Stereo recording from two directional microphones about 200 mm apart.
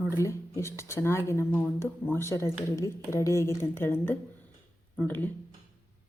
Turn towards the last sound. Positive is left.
turn(degrees=10)  # may be behind; listen again after turning